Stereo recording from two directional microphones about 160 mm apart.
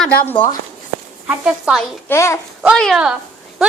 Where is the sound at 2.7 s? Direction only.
5° left (ahead or behind).